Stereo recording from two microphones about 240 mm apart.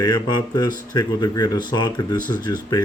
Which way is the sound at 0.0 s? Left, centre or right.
Centre.